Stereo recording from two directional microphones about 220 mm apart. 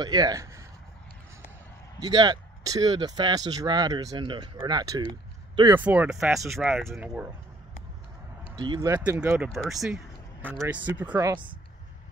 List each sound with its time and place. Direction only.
0.0 s speech: 20° right (ahead or behind)
2.0 s speech: 20° right (ahead or behind)
5.8 s speech: 5° right (ahead or behind)
8.5 s speech: 20° right (ahead or behind)